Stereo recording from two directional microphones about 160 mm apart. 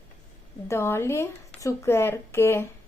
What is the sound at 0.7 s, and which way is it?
A woman's voice, 15° left (ahead or behind).